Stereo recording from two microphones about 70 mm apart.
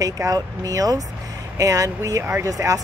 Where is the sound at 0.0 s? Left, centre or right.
Right.